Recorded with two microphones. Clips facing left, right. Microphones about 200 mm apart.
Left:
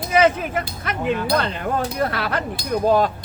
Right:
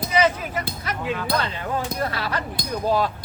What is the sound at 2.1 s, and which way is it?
Speech, 55° left (ahead or behind).